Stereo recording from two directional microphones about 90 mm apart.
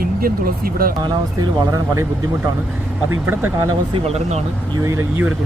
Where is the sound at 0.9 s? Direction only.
45° right (ahead or behind).